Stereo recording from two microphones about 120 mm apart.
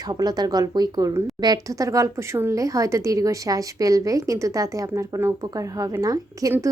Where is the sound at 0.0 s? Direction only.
35° right (ahead or behind).